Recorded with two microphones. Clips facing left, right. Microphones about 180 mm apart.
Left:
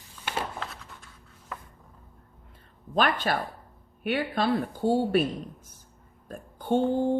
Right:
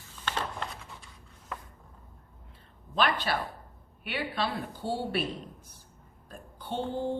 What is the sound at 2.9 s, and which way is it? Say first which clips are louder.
A woman's voice: left 3 dB; 45° left (ahead or behind).